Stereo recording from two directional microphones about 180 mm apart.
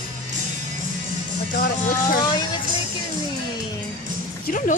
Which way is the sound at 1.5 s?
55° left (ahead or behind).